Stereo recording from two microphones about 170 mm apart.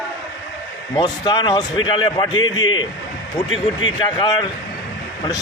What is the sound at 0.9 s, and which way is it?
Speech, 25° left (ahead or behind).